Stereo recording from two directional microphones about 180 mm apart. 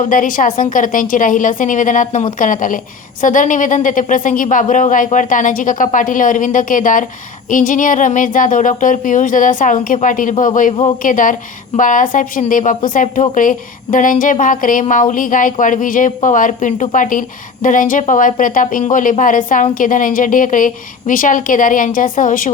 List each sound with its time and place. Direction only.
0.0 s speech: 45° left (ahead or behind)